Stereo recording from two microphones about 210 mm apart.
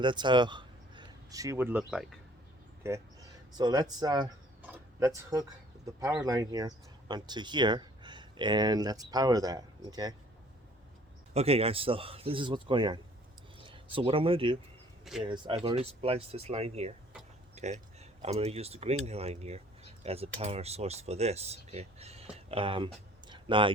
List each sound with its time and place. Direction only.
0.0 s speech: 20° right (ahead or behind); by 2.1 s centre (ahead or behind)
2.8 s speech: 15° right (ahead or behind)
4.6 s tick-tock: 10° right (ahead or behind)
6.0 s speech: 15° right (ahead or behind)
11.3 s speech: 30° right (ahead or behind)
23.3 s a sound: 25° right (ahead or behind)